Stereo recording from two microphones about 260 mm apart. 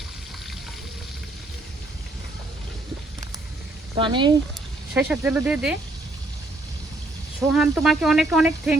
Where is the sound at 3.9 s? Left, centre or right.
Centre.